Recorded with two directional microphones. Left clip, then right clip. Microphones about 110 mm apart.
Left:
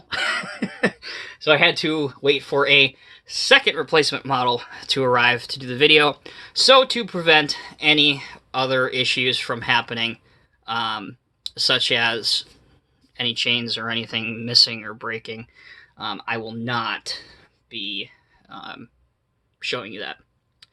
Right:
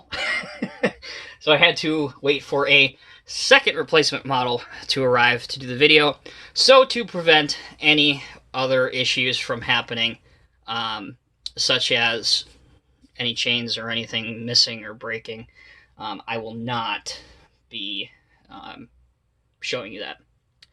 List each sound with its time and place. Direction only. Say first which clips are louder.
0.1 s speech: left 2 dB; 55° left (ahead or behind)